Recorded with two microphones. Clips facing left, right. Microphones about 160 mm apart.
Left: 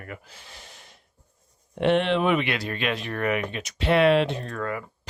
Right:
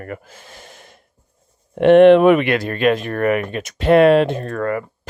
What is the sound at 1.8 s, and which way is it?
Speech, 55° right (ahead or behind).